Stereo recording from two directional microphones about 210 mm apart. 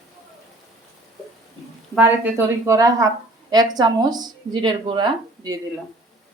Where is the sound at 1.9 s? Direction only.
10° right (ahead or behind).